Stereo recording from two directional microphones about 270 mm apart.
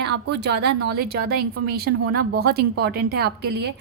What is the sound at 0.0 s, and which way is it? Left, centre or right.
A woman's voice, right.